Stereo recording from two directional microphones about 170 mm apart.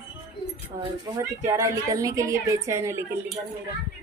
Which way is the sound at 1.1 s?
20° right (ahead or behind).